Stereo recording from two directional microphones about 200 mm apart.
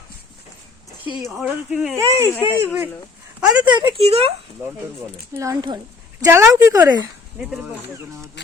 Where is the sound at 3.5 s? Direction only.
20° right (ahead or behind).